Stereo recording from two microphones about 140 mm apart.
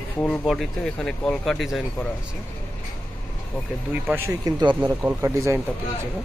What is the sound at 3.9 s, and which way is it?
Speech, 15° right (ahead or behind).